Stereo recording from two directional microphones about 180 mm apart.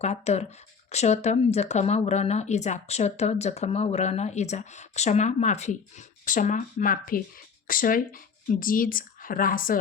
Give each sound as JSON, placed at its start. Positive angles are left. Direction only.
{"t": 0.0, "sound": "speech", "side_deg": 35}